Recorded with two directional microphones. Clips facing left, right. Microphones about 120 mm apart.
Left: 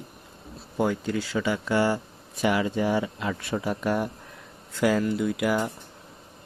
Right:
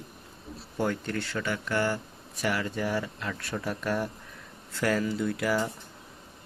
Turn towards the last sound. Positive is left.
turn(degrees=5)  # may be behind; listen again after turning